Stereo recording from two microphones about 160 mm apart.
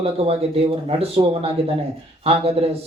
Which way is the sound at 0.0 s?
40° right (ahead or behind).